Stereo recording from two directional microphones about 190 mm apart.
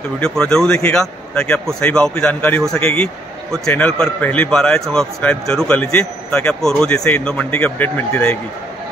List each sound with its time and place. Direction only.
0.2 s a man's voice: 5° left (ahead or behind)